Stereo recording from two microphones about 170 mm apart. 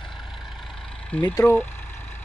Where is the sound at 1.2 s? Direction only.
15° left (ahead or behind).